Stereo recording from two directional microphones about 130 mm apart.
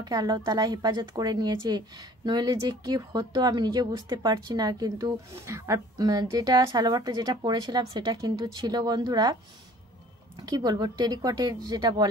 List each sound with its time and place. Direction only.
0.0 s speech: 30° right (ahead or behind)